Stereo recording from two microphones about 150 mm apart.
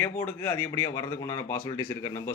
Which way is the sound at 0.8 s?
25° left (ahead or behind).